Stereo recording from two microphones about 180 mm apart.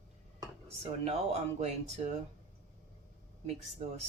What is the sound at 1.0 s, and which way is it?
Speech, 35° right (ahead or behind).